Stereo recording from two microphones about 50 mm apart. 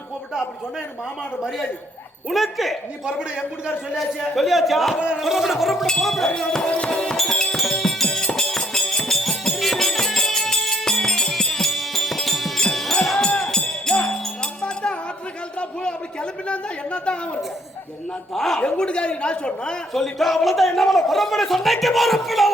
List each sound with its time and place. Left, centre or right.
2.3 s a man's voice: centre
3.1 s a man's voice: centre
3.9 s a man's voice: centre
4.9 s speech: right
5.2 s a man's voice: centre
6.2 s a man's voice: centre
7.2 s music: centre
16.5 s a man's voice: left
18.3 s a man's voice: centre
18.6 s a man's voice: left
19.9 s a man's voice: centre